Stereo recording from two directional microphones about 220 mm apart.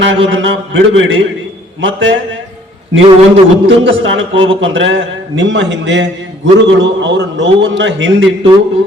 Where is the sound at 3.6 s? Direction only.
60° right (ahead or behind).